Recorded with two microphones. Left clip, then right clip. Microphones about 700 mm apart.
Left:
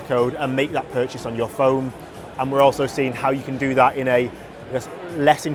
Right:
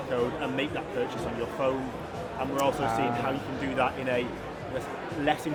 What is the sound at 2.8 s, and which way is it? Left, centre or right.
A man's voice, left.